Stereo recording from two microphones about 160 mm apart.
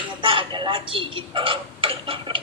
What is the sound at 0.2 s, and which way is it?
Speech, 35° right (ahead or behind).